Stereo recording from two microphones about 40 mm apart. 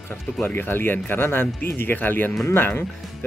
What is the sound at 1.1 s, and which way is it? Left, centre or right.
Speech, left.